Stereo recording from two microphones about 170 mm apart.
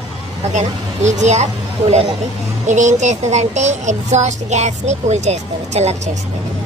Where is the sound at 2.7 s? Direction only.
45° right (ahead or behind).